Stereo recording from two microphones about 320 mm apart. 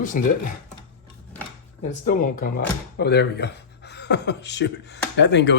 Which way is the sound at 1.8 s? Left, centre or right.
Left.